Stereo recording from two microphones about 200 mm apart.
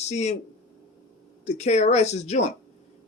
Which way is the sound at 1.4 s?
35° left (ahead or behind).